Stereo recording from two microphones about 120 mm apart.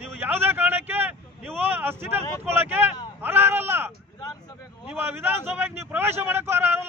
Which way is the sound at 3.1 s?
20° right (ahead or behind).